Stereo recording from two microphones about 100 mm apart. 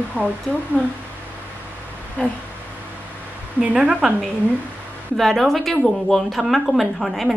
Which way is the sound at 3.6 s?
10° right (ahead or behind).